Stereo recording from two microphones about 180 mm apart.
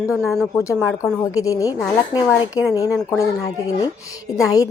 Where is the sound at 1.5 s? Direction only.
20° left (ahead or behind).